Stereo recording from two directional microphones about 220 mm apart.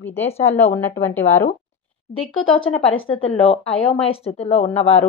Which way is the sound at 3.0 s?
25° left (ahead or behind).